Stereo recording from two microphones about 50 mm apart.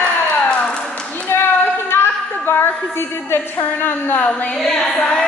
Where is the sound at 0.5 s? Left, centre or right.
Left.